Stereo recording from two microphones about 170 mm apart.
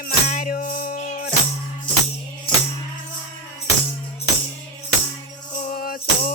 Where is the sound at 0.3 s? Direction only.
55° left (ahead or behind).